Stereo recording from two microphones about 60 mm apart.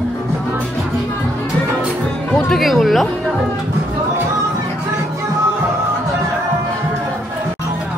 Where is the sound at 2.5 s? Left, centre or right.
Centre.